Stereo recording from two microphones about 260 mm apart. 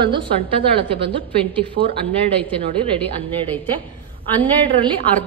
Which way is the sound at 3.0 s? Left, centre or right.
Centre.